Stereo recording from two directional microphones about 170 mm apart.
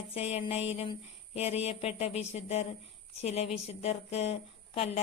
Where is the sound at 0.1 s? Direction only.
40° left (ahead or behind).